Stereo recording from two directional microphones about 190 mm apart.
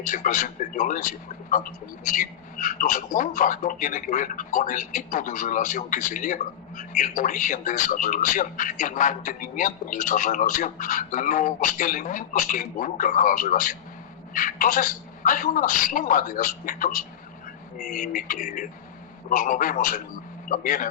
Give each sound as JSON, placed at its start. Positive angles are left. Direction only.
{"t": 0.0, "sound": "a man's voice", "side_deg": 45}